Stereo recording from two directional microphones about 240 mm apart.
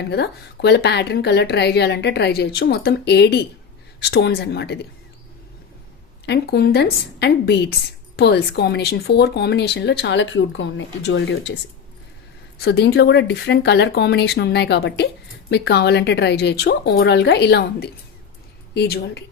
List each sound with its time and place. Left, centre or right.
0.1 s a woman's voice: left
6.2 s a woman's voice: left
12.6 s a woman's voice: left